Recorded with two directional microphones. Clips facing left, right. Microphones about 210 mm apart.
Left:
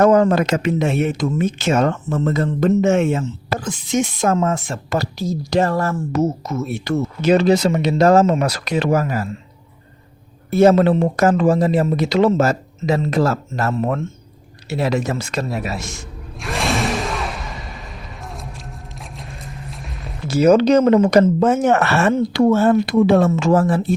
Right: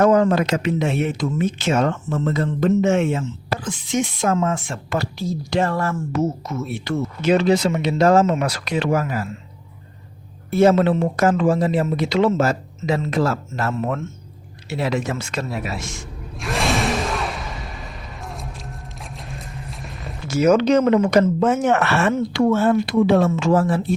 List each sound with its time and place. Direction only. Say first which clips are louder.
0.0 s speech: left 2 dB; 45° left (ahead or behind)
10.5 s speech: left 3 dB; 40° left (ahead or behind)
16.4 s a sound: even; centre (ahead or behind)
19.4 s music: left 1 dB; centre (ahead or behind)
20.2 s speech: left 3 dB; 30° left (ahead or behind); by 23.8 s 45° left (ahead or behind)